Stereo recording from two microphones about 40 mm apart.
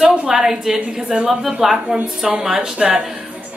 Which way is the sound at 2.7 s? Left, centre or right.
Right.